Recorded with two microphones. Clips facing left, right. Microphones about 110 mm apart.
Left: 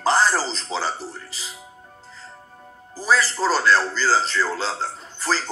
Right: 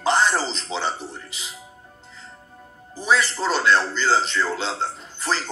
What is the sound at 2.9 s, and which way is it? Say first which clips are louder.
A man's voice: even; 40° left (ahead or behind).